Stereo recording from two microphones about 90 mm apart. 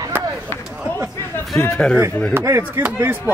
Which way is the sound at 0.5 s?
25° left (ahead or behind).